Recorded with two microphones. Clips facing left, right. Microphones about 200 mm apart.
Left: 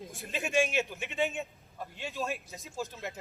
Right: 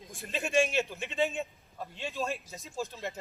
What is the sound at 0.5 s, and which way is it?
Speech, 15° left (ahead or behind).